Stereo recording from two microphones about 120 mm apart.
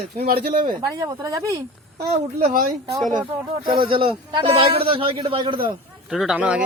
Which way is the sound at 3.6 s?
50° right (ahead or behind).